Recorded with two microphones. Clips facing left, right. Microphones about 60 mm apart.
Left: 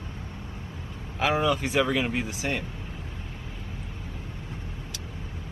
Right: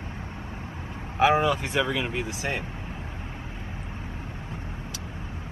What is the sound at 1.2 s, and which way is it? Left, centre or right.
Speech, right.